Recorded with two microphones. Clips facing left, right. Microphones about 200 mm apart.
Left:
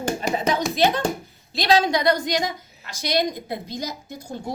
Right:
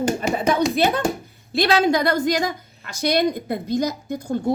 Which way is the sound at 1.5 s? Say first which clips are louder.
Right 2 dB; 50° right (ahead or behind).